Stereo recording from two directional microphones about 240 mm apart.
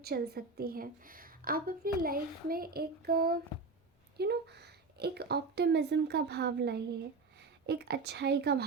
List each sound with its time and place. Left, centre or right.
0.0 s a woman's voice: right